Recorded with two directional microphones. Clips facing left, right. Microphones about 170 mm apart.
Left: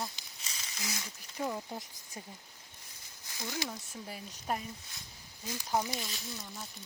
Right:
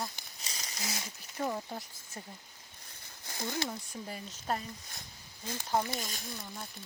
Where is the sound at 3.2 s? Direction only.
55° right (ahead or behind).